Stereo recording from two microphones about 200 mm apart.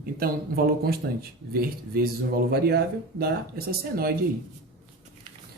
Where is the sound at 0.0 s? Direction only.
50° right (ahead or behind).